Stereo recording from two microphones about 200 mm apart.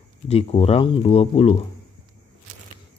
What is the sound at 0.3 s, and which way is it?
Speech, 30° left (ahead or behind).